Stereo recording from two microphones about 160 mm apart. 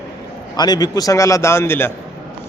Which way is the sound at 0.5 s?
25° left (ahead or behind).